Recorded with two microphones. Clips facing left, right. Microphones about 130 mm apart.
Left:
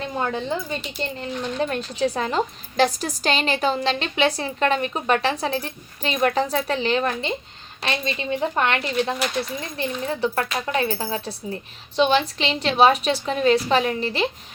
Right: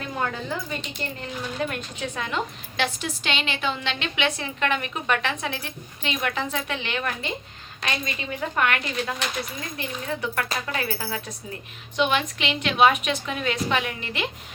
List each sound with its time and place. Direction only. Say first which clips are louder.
0.0 s a woman's voice: left 3 dB; 25° left (ahead or behind)